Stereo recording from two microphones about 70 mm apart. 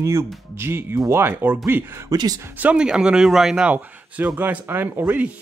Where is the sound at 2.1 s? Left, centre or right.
Right.